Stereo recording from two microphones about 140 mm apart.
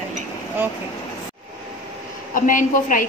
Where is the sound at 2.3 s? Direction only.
75° left (ahead or behind).